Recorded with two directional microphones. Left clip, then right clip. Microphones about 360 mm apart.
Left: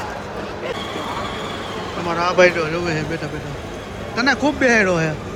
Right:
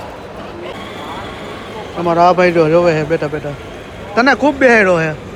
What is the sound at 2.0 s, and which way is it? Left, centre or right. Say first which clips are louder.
Speech: right 5 dB; centre.